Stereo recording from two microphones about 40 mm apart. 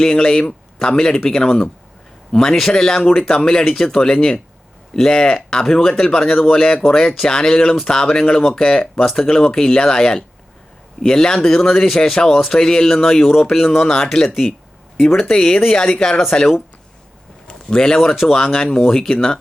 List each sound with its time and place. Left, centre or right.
0.0 s speech: centre
17.5 s a sound: centre
18.1 s speech: centre
18.5 s speech: centre